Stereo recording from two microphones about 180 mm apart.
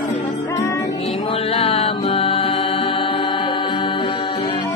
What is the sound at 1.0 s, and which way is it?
Mantra, 30° left (ahead or behind).